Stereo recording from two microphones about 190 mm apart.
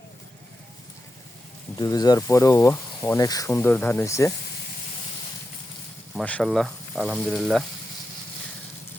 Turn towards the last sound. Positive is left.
turn(degrees=0)  # may be behind; listen again after turning